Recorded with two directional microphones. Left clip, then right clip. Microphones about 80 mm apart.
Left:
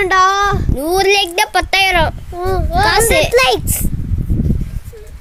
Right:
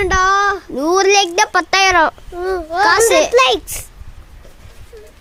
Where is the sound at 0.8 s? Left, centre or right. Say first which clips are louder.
Right 1 dB; right.